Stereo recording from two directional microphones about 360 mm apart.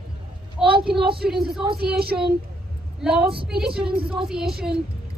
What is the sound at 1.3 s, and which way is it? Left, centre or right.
Speech, centre.